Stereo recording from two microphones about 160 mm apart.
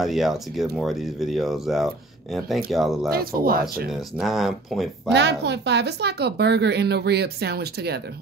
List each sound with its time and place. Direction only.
0.0 s speech: centre (ahead or behind)
3.1 s speech: 70° right (ahead or behind)
3.9 s speech: centre (ahead or behind)
5.1 s speech: 90° right